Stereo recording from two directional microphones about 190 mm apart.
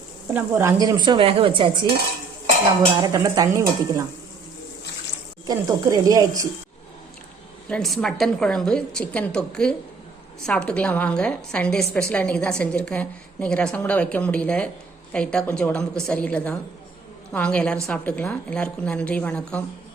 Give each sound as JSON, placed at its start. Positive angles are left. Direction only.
{"t": 0.3, "sound": "speech", "side_deg": -15}
{"t": 5.5, "sound": "speech", "side_deg": -20}
{"t": 7.7, "sound": "a woman's voice", "side_deg": 0}